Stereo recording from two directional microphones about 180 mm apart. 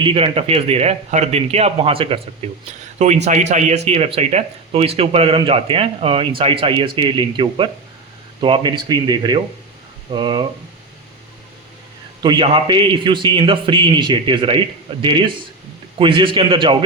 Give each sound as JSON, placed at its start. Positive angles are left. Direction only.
{"t": 0.0, "sound": "a man's voice", "side_deg": -30}
{"t": 12.2, "sound": "a man's voice", "side_deg": -25}